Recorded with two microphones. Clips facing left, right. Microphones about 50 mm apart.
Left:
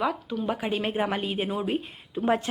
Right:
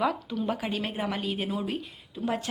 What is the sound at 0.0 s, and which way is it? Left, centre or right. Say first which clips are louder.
Speech: even; centre.